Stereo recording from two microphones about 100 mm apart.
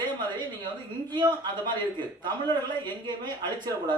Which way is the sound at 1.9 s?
50° right (ahead or behind).